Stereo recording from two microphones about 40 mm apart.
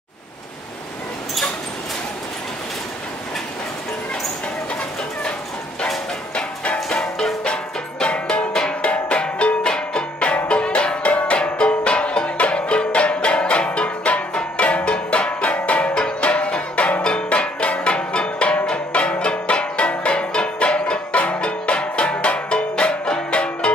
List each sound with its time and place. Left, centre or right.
6.3 s music: left
7.0 s music: centre